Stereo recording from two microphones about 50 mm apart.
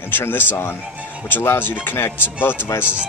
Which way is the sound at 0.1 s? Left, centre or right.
Left.